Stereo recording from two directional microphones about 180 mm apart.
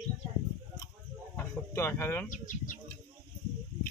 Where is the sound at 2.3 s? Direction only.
45° left (ahead or behind).